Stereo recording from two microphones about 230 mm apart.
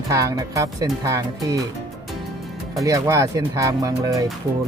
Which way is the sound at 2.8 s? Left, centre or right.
Centre.